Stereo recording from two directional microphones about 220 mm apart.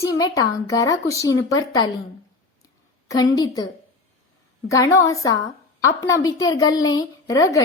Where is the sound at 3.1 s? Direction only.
15° left (ahead or behind).